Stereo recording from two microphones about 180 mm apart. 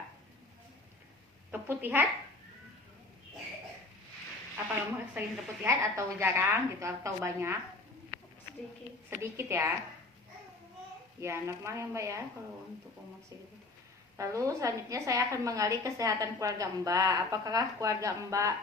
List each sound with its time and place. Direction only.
1.5 s a woman's voice: 10° right (ahead or behind)
4.5 s a woman's voice: 10° right (ahead or behind)
9.0 s a woman's voice: 15° right (ahead or behind)
11.2 s a woman's voice: 15° right (ahead or behind)
14.2 s a woman's voice: 15° right (ahead or behind)